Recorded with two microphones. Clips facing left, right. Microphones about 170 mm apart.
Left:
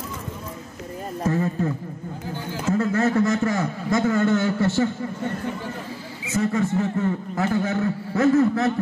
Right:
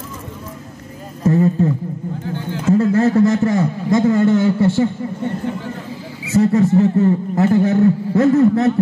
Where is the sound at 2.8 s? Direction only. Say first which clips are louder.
Right 6 dB; 35° right (ahead or behind).